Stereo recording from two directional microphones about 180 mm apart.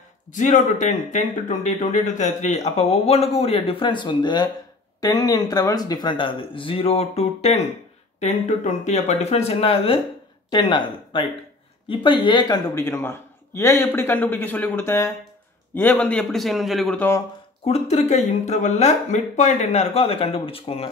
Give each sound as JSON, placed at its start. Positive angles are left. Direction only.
{"t": 0.3, "sound": "a man's voice", "side_deg": 45}
{"t": 17.6, "sound": "speech", "side_deg": 35}